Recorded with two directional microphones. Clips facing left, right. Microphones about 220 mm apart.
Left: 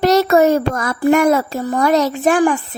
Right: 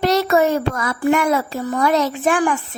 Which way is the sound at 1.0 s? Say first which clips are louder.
Left 4 dB; 40° left (ahead or behind).